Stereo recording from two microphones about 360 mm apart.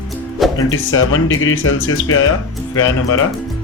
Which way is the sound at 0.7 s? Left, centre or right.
Left.